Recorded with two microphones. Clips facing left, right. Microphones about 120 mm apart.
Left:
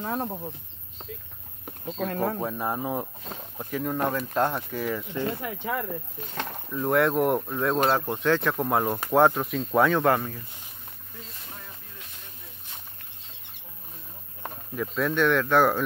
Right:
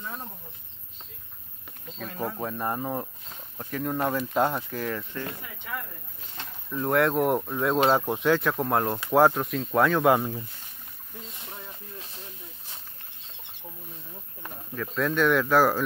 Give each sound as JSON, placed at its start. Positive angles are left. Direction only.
{"t": 0.0, "sound": "speech", "side_deg": 60}
{"t": 2.0, "sound": "speech", "side_deg": 55}
{"t": 2.4, "sound": "speech", "side_deg": 5}
{"t": 6.3, "sound": "speech", "side_deg": 65}
{"t": 6.7, "sound": "speech", "side_deg": 0}
{"t": 7.8, "sound": "speech", "side_deg": -10}
{"t": 10.0, "sound": "speech", "side_deg": -15}
{"t": 15.0, "sound": "speech", "side_deg": 0}